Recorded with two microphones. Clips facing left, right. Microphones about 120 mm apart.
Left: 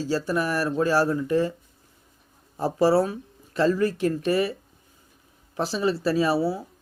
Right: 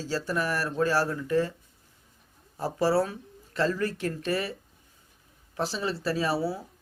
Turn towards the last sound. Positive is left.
turn(degrees=10)  # may be behind; listen again after turning